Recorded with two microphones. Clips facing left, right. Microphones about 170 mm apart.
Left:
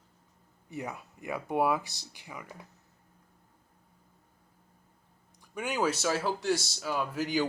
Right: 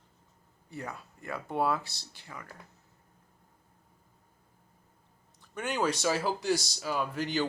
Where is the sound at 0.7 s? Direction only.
20° left (ahead or behind).